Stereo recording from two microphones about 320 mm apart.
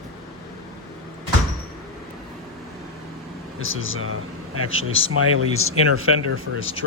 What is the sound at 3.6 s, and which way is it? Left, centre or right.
Speech, left.